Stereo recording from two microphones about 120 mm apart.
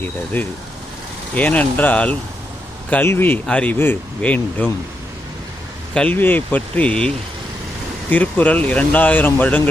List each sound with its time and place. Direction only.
1.4 s speech: 15° left (ahead or behind)
5.9 s speech: 10° left (ahead or behind)
8.1 s speech: 15° left (ahead or behind)